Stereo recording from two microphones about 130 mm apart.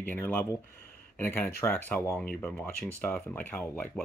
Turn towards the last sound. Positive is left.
turn(degrees=15)  # may be behind; listen again after turning